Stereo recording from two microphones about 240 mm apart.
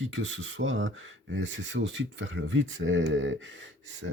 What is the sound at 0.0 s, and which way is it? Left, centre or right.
Speech, right.